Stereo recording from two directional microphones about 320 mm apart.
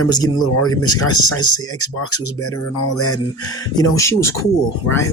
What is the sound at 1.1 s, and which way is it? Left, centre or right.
Speech, centre.